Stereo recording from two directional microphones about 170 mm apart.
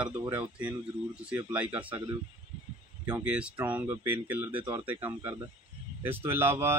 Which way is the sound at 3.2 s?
10° right (ahead or behind).